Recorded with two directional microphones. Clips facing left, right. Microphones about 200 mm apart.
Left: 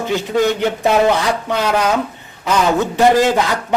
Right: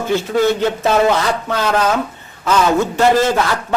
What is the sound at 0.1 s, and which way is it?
A man's voice, 15° left (ahead or behind).